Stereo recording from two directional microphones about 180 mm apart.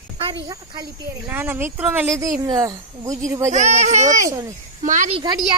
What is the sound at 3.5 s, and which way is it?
Speech, 40° right (ahead or behind).